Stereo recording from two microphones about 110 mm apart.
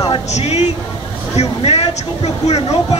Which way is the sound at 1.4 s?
70° left (ahead or behind).